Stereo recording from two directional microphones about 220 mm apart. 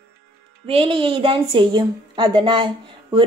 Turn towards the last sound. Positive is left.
turn(degrees=-20)  # may be behind; listen again after turning